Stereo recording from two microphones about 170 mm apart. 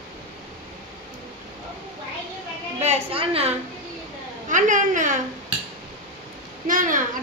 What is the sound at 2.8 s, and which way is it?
Speech, 40° right (ahead or behind).